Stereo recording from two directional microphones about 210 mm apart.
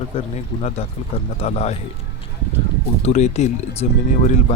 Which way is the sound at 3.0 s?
30° left (ahead or behind).